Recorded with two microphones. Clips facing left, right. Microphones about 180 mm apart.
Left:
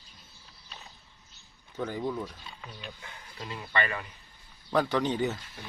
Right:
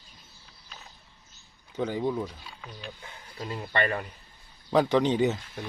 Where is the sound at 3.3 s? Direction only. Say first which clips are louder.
Right 3 dB; 35° right (ahead or behind).